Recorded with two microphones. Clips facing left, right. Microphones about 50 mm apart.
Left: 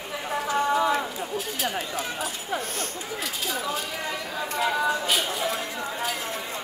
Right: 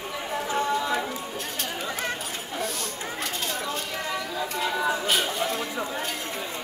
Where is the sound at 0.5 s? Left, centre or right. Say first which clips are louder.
Left 2 dB; centre.